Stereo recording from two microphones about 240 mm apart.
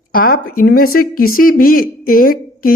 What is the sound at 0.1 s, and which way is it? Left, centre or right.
A woman's voice, left.